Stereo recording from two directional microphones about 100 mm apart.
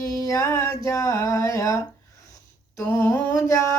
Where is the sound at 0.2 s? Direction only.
30° left (ahead or behind).